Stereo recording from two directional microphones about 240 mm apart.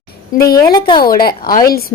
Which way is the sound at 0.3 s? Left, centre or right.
Left.